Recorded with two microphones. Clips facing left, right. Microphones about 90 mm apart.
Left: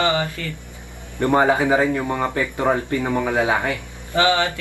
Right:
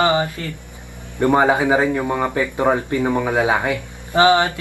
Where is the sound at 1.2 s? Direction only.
20° right (ahead or behind).